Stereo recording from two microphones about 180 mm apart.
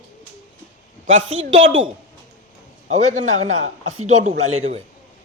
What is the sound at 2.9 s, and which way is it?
Speech, 40° right (ahead or behind).